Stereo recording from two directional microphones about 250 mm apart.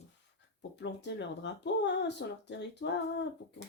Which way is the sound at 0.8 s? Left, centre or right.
Left.